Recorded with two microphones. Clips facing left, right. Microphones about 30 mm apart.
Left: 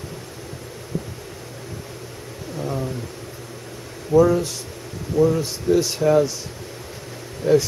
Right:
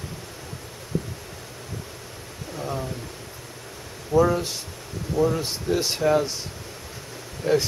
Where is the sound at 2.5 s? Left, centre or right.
Centre.